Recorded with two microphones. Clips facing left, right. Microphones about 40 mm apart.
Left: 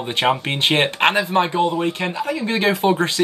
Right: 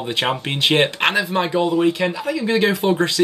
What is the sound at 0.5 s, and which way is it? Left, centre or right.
Speech, left.